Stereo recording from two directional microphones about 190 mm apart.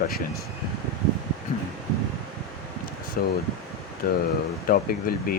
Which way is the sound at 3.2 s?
50° left (ahead or behind).